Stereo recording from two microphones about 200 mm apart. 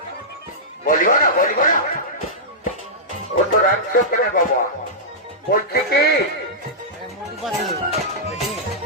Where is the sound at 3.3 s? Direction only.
55° left (ahead or behind).